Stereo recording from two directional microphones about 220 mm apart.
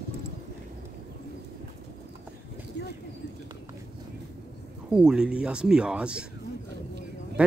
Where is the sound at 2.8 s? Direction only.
50° left (ahead or behind).